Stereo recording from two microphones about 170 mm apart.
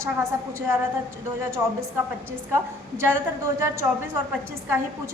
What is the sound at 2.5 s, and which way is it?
A woman's voice, 15° right (ahead or behind).